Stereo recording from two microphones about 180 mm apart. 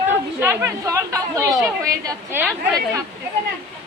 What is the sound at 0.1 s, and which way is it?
A woman's voice, 15° right (ahead or behind).